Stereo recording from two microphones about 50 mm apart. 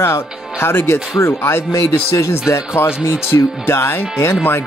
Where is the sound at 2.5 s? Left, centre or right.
Left.